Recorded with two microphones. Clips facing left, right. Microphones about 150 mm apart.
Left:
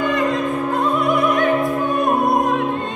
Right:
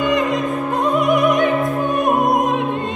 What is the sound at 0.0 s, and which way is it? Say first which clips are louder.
Music: right 1 dB; 20° right (ahead or behind).